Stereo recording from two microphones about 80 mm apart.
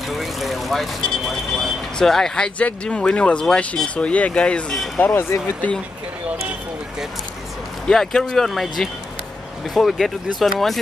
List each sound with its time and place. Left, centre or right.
0.1 s speech: centre; by 5.2 s left
7.9 s speech: centre